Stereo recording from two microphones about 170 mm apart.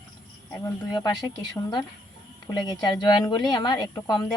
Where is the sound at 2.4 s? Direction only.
25° left (ahead or behind).